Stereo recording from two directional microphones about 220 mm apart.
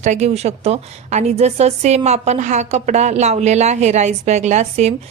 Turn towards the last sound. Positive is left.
turn(degrees=-30)  # may be behind; listen again after turning